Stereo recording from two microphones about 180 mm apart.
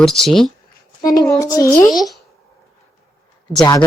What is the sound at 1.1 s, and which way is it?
Child singing, 20° left (ahead or behind).